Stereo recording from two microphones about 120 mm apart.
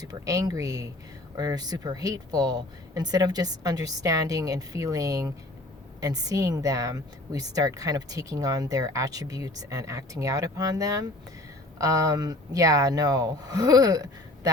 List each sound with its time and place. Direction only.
0.0 s speech: 30° right (ahead or behind)